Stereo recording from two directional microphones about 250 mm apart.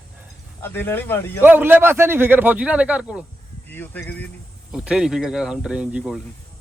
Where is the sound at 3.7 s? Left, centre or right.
Centre.